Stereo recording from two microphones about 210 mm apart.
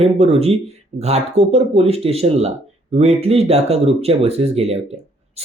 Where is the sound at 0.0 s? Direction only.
30° right (ahead or behind).